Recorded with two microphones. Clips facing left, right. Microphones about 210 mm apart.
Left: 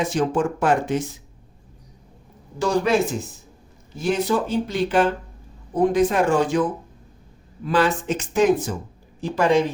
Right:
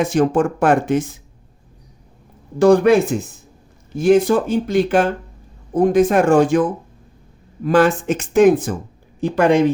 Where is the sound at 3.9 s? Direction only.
50° right (ahead or behind).